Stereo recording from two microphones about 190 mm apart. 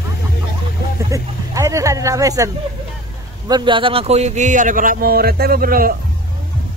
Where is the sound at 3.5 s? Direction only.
25° right (ahead or behind); by 5.9 s 50° right (ahead or behind).